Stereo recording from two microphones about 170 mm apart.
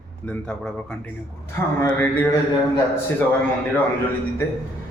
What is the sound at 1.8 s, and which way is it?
Speech, 15° left (ahead or behind).